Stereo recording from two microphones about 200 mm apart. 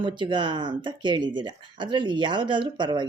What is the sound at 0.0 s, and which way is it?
Speech, 25° right (ahead or behind).